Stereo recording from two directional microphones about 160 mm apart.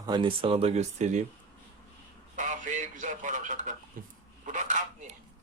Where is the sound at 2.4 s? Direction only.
50° right (ahead or behind).